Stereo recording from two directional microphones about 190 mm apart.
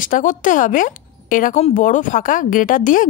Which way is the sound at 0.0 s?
45° left (ahead or behind).